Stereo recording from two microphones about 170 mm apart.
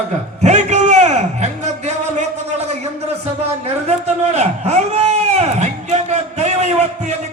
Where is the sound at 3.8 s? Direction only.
40° right (ahead or behind).